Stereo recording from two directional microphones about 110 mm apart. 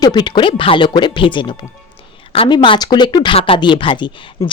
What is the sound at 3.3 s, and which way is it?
Speech, 55° left (ahead or behind).